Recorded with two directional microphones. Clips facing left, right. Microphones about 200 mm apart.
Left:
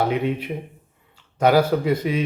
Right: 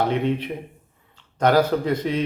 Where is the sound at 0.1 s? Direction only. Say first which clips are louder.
Even; 5° left (ahead or behind).